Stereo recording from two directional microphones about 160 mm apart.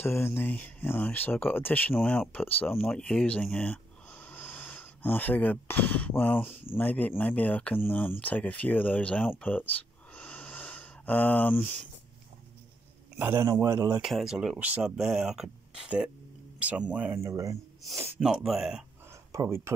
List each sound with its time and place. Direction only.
0.0 s speech: 15° left (ahead or behind)
13.2 s speech: 15° right (ahead or behind)
14.0 s speech: 5° right (ahead or behind); by 17.6 s 20° right (ahead or behind)
18.2 s speech: centre (ahead or behind)
19.3 s speech: 20° right (ahead or behind)